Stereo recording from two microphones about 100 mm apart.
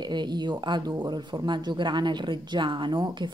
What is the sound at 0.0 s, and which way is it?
Speech, 45° right (ahead or behind).